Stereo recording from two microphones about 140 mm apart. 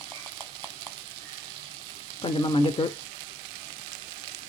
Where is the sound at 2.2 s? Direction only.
40° left (ahead or behind).